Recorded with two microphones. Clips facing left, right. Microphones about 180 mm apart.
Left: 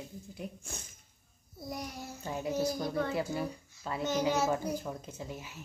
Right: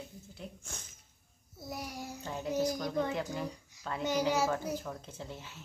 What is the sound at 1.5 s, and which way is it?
Babbling, 5° right (ahead or behind).